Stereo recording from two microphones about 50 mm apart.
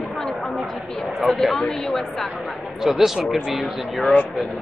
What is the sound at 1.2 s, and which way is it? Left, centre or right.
Speech, centre.